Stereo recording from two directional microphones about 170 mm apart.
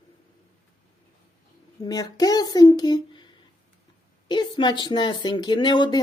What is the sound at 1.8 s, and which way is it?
Speech, 20° left (ahead or behind).